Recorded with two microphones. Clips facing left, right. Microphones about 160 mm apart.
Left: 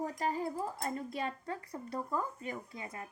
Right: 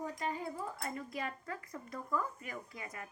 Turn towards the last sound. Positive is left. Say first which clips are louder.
# left 2 dB
turn(degrees=30)  # may be behind; listen again after turning